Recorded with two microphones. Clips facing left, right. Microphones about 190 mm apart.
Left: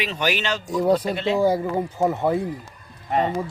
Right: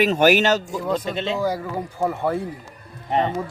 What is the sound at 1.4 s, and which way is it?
Speech, 25° left (ahead or behind).